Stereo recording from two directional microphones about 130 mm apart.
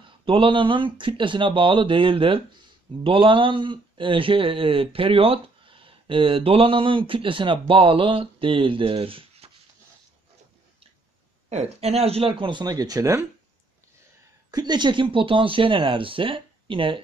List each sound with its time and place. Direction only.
0.0 s speech: 40° right (ahead or behind)
11.4 s speech: 55° right (ahead or behind); by 13.2 s 25° right (ahead or behind)
14.5 s speech: 35° right (ahead or behind)